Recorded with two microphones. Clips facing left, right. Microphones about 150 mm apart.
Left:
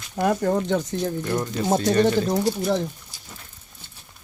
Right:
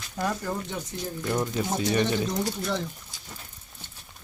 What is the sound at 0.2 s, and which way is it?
Speech, 55° left (ahead or behind).